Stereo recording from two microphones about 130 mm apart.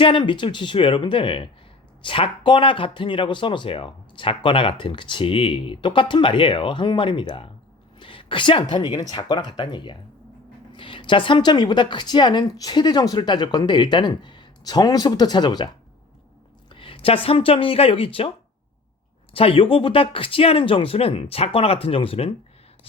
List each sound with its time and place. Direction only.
0.0 s speech: 40° left (ahead or behind)
7.9 s a sound: 40° left (ahead or behind)
8.7 s speech: 30° left (ahead or behind)
16.6 s a sound: 40° left (ahead or behind)
17.2 s speech: 45° left (ahead or behind)
19.3 s speech: 45° left (ahead or behind)